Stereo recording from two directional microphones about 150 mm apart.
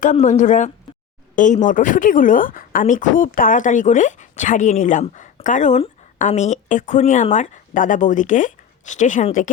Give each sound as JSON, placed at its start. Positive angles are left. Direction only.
{"t": 0.0, "sound": "speech", "side_deg": 55}